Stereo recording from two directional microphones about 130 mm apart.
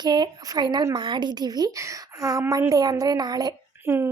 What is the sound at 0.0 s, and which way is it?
Speech, 35° right (ahead or behind).